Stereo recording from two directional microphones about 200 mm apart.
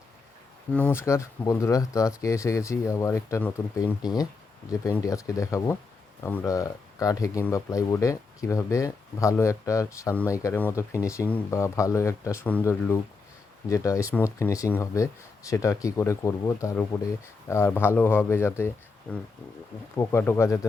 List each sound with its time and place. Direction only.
0.7 s speech: 5° left (ahead or behind)